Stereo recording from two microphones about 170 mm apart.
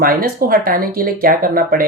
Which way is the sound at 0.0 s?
60° right (ahead or behind).